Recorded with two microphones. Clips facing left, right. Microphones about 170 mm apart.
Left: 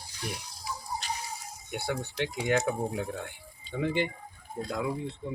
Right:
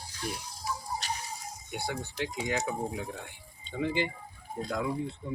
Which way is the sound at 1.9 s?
60° left (ahead or behind).